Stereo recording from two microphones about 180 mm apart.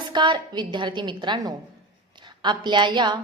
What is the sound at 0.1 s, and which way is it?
A woman's voice, 25° right (ahead or behind).